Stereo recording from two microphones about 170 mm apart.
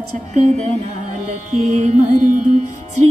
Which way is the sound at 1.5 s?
40° right (ahead or behind).